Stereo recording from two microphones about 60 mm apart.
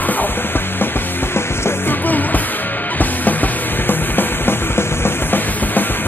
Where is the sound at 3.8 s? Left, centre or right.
Left.